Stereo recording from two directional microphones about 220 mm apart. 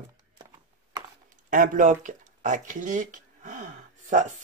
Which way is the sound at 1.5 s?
40° right (ahead or behind).